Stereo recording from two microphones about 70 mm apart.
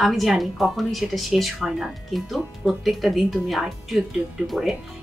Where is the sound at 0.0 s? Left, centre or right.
Centre.